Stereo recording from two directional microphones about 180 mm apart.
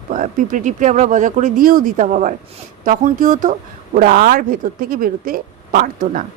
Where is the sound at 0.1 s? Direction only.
45° right (ahead or behind).